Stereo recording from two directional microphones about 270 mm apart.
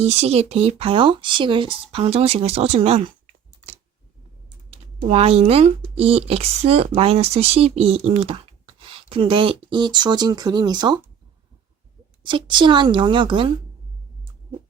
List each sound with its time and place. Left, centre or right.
0.0 s speech: right
4.4 s speech: right
12.2 s a woman's voice: centre